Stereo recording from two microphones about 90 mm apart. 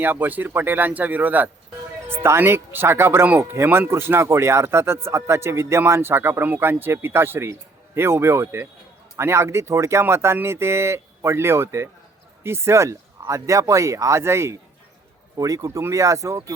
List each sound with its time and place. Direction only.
0.0 s speech: 20° right (ahead or behind)